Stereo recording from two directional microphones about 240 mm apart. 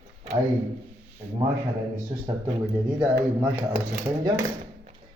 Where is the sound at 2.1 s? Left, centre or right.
Centre.